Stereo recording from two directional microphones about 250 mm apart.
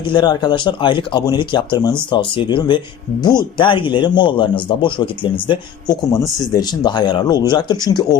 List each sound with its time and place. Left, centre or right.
0.1 s speech: centre